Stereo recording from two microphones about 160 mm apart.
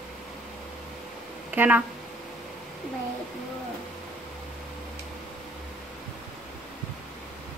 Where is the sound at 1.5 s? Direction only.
10° right (ahead or behind).